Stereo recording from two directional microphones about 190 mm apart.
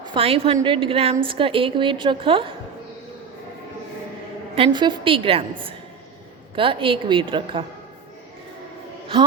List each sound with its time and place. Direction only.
0.0 s a woman's voice: 25° right (ahead or behind)
4.5 s a woman's voice: 25° right (ahead or behind)